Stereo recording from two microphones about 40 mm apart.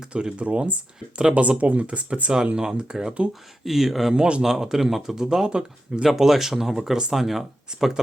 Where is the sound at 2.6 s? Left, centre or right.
Centre.